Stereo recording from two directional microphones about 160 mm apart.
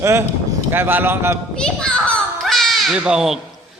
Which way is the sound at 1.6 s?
5° left (ahead or behind).